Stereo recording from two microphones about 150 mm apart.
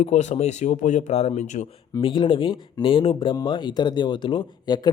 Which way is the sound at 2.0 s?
35° left (ahead or behind).